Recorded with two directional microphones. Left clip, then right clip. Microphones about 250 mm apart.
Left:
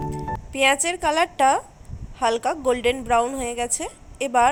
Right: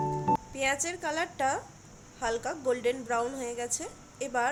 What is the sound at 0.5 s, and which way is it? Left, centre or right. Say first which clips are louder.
A woman's voice: left 11 dB; centre.